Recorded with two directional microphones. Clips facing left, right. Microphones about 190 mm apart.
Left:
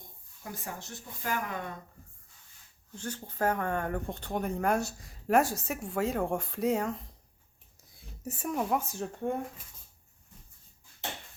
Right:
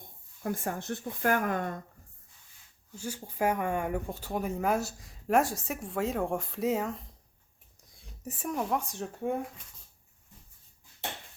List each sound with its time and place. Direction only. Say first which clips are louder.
0.4 s speech: right 8 dB; 50° right (ahead or behind)
2.9 s speech: even; 10° right (ahead or behind)